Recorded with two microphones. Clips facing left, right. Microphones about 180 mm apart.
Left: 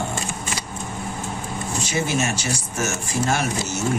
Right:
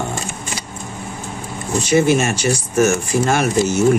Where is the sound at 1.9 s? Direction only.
60° right (ahead or behind).